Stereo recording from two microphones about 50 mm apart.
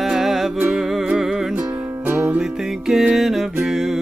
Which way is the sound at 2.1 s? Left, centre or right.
Right.